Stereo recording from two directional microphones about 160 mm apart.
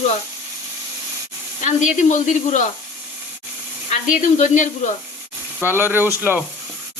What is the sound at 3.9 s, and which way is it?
Speech, 50° left (ahead or behind).